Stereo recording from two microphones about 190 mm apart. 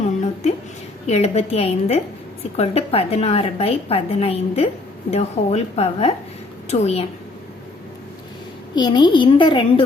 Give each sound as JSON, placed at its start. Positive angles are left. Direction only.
{"t": 1.0, "sound": "a woman's voice", "side_deg": 35}
{"t": 8.7, "sound": "a woman's voice", "side_deg": 25}